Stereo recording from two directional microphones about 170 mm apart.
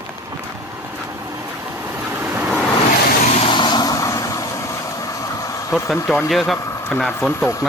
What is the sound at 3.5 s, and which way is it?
Vehicle, 25° left (ahead or behind).